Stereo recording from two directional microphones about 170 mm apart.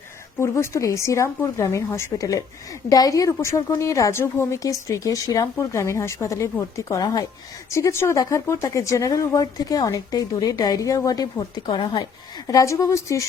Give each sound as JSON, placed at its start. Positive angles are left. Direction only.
{"t": 0.3, "sound": "speech", "side_deg": 15}